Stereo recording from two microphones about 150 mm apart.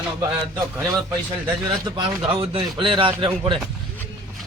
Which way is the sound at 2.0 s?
35° right (ahead or behind).